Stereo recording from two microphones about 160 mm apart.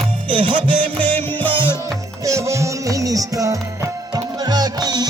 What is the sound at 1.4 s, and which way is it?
Music, 30° right (ahead or behind).